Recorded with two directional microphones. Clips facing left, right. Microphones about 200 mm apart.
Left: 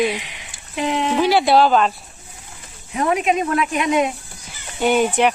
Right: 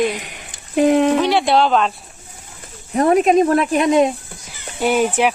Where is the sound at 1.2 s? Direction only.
5° left (ahead or behind).